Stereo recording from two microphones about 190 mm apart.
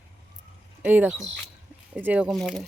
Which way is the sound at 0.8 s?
10° right (ahead or behind).